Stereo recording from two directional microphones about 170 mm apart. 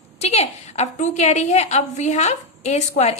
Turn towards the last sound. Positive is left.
turn(degrees=40)  # may be behind; listen again after turning